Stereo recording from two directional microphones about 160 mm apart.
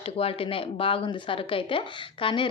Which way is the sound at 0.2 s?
35° left (ahead or behind).